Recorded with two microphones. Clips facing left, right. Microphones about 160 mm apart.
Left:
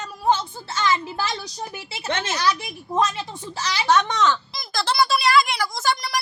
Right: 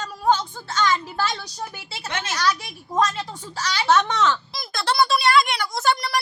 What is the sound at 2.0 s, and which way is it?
Speech, 25° left (ahead or behind).